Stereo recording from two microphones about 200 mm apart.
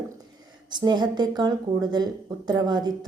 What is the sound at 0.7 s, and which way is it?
Speech, 20° right (ahead or behind).